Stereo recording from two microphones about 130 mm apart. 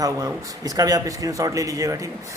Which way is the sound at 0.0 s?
30° right (ahead or behind).